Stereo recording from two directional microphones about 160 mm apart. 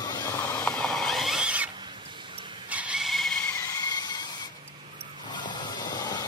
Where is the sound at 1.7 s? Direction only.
30° right (ahead or behind).